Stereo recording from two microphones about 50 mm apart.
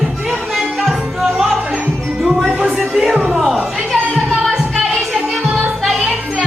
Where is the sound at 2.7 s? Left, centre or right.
Centre.